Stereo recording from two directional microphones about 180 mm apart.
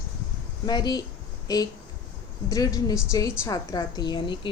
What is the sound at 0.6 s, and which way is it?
A woman's voice, 20° left (ahead or behind).